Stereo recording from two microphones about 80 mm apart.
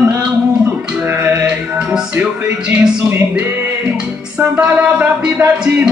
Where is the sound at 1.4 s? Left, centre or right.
Centre.